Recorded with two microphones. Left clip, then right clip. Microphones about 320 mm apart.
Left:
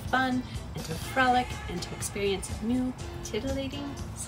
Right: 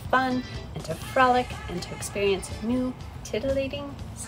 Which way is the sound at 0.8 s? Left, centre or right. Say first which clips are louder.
Right 4 dB; centre.